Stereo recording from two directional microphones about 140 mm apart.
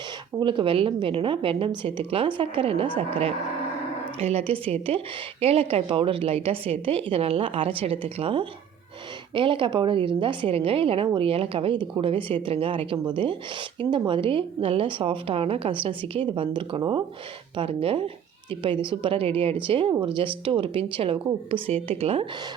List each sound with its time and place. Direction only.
0.3 s a woman's voice: 35° right (ahead or behind)